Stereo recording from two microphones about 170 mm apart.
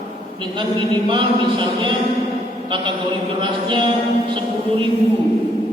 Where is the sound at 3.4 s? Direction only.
30° right (ahead or behind).